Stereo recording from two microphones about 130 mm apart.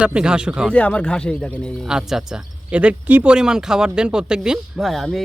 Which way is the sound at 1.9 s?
5° right (ahead or behind).